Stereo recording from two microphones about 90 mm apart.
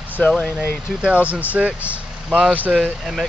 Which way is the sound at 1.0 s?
15° right (ahead or behind).